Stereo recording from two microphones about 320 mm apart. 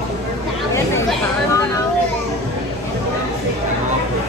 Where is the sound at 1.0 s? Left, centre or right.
Centre.